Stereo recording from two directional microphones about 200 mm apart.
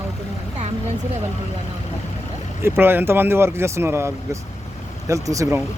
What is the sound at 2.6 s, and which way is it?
Speech, 10° right (ahead or behind).